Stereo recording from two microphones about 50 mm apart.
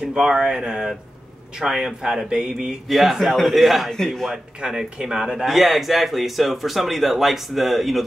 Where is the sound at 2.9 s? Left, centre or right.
Centre.